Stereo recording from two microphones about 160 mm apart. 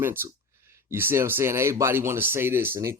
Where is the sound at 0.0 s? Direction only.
15° right (ahead or behind).